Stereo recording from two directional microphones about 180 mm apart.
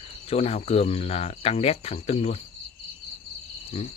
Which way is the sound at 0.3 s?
35° left (ahead or behind).